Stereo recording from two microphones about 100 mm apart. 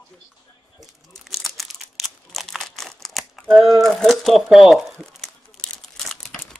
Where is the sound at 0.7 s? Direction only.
Centre (ahead or behind).